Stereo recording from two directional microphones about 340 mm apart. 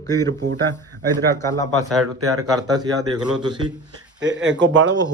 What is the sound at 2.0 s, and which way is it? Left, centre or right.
Speech, right.